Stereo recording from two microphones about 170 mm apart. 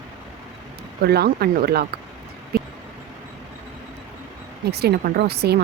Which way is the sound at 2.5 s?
65° right (ahead or behind).